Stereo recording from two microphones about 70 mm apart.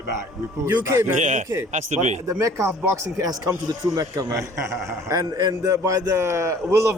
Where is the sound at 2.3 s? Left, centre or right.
Right.